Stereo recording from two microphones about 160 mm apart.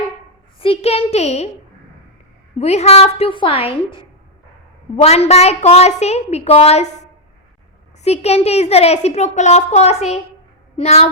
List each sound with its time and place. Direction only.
0.6 s a woman's voice: 40° left (ahead or behind)
2.6 s a woman's voice: 45° left (ahead or behind)